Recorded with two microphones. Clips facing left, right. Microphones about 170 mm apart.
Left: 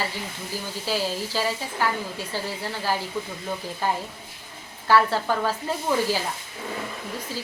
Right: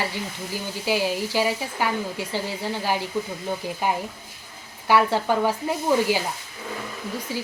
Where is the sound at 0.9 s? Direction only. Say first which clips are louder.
Right 4 dB; 15° right (ahead or behind).